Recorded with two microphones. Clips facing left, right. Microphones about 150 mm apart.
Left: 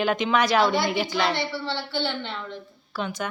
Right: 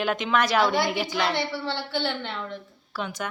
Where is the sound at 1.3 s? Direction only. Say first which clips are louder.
Even; 15° right (ahead or behind).